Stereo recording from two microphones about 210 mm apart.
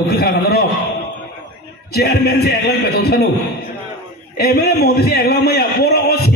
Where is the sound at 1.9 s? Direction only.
50° left (ahead or behind).